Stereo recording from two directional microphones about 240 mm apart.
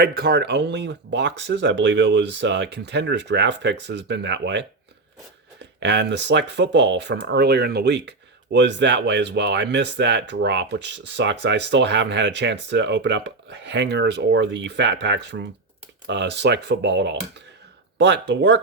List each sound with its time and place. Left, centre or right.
0.0 s speech: right
5.8 s speech: right